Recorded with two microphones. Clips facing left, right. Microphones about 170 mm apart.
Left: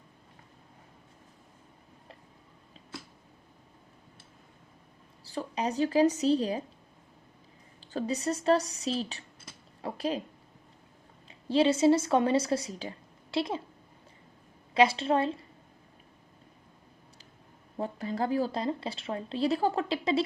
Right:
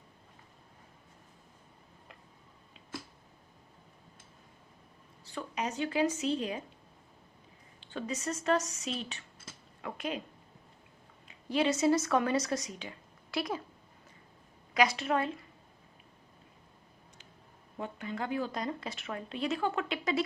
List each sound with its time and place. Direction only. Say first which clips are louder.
5.2 s a woman's voice: left 4 dB; 35° left (ahead or behind)
7.8 s a woman's voice: left 6 dB; 35° left (ahead or behind)
11.3 s speech: left 5 dB; 30° left (ahead or behind)
14.7 s a woman's voice: left 4 dB; 30° left (ahead or behind)
17.7 s a woman's voice: left 6 dB; 35° left (ahead or behind)